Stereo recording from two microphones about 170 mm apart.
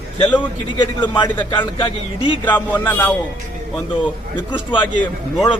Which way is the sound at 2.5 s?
10° left (ahead or behind).